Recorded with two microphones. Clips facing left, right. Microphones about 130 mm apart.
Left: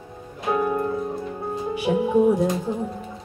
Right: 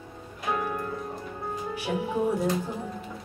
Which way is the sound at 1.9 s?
10° left (ahead or behind).